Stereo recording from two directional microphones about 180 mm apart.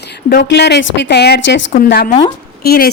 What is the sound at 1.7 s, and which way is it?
A woman's voice, 55° left (ahead or behind).